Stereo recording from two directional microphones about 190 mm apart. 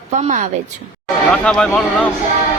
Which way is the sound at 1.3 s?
5° left (ahead or behind).